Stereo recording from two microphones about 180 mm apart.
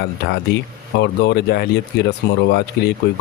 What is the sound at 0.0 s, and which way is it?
Speech, 70° left (ahead or behind).